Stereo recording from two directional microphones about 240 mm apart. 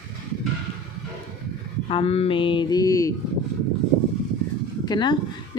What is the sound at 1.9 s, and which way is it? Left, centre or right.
A woman's voice, left.